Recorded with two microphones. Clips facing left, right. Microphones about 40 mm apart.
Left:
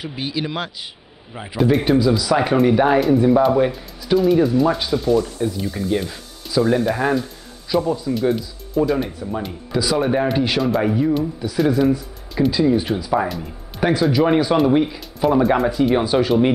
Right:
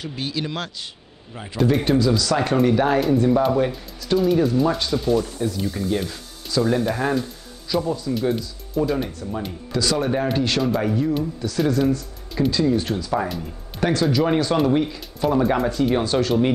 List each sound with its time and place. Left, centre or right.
0.0 s speech: centre
8.9 s speech: centre